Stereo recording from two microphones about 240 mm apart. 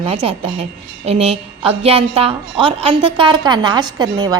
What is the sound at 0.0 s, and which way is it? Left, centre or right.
A woman's voice, right.